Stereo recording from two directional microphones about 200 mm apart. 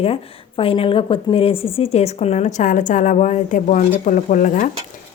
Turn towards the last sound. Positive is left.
turn(degrees=40)  # may be behind; listen again after turning